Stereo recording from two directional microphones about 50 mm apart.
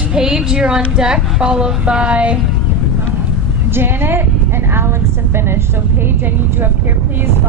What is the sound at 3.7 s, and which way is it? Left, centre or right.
A woman's voice, right.